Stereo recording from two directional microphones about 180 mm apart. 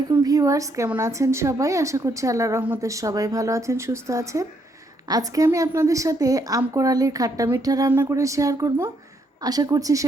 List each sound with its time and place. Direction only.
0.1 s a woman's voice: 20° right (ahead or behind)